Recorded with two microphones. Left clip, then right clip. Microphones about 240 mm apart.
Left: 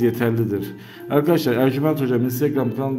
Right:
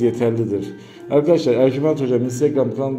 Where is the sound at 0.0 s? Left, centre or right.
Centre.